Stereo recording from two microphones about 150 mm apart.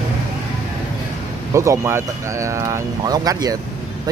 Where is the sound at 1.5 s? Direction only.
20° right (ahead or behind).